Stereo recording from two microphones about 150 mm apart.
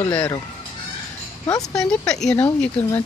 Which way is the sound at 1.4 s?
25° left (ahead or behind).